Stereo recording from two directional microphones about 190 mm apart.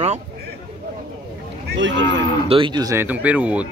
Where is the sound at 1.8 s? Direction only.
70° right (ahead or behind).